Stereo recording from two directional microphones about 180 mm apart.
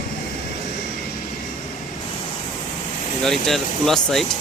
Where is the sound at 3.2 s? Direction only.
Centre (ahead or behind).